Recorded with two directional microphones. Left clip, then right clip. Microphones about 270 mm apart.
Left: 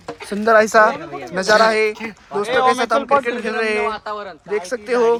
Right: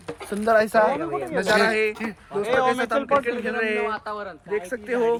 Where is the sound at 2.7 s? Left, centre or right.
Centre.